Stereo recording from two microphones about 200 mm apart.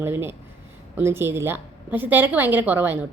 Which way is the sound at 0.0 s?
10° right (ahead or behind).